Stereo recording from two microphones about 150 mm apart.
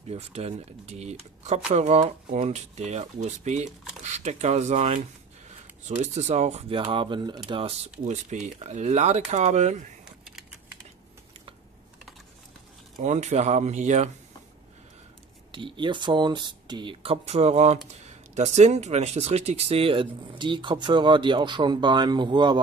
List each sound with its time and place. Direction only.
0.1 s speech: 45° right (ahead or behind)
13.0 s speech: 50° right (ahead or behind)
15.5 s speech: 35° right (ahead or behind)